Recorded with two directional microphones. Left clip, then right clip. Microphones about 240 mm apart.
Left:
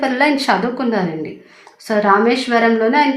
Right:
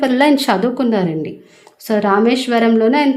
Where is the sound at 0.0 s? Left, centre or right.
Right.